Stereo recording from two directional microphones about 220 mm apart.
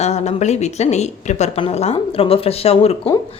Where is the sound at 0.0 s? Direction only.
30° left (ahead or behind).